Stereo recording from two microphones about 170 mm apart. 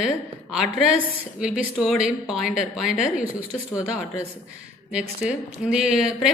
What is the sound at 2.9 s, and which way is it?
Speech, 50° left (ahead or behind).